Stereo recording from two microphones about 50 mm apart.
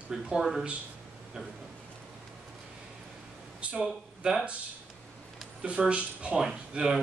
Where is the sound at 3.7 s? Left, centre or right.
Right.